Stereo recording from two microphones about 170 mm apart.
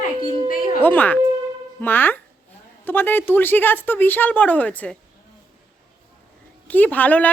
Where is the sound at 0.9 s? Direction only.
10° left (ahead or behind).